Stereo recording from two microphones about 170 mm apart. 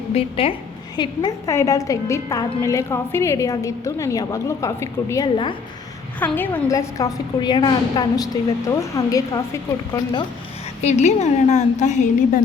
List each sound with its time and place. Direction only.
0.1 s a woman's voice: 35° left (ahead or behind)
0.9 s a woman's voice: 20° left (ahead or behind)
6.1 s a woman's voice: 10° left (ahead or behind)
10.8 s a woman's voice: 40° left (ahead or behind)